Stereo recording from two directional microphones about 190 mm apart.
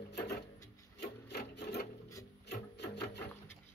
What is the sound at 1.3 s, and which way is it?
Sewing machine, 60° left (ahead or behind).